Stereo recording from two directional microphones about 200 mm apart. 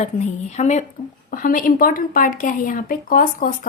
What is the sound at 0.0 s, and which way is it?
Speech, 35° left (ahead or behind).